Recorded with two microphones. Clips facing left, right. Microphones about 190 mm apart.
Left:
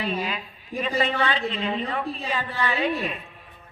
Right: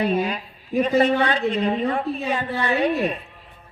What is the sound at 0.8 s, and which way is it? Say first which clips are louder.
A man's voice: right 7 dB; 45° right (ahead or behind).